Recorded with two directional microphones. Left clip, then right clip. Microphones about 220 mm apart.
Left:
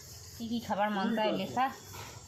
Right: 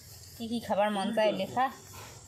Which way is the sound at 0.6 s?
45° right (ahead or behind).